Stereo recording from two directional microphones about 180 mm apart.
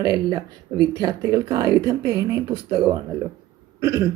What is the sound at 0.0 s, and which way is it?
Speech, 25° right (ahead or behind).